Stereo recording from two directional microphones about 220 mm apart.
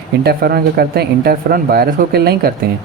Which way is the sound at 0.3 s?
45° right (ahead or behind).